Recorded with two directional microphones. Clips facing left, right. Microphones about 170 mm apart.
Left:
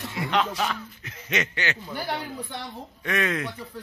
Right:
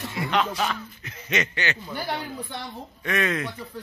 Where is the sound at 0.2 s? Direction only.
25° left (ahead or behind).